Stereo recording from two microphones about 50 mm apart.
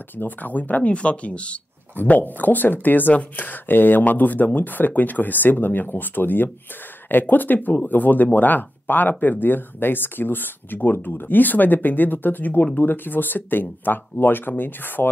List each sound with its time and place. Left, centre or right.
0.2 s speech: left
2.0 s speech: left